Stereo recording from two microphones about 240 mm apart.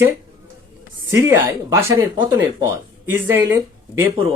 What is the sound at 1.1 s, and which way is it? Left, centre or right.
Speech, centre.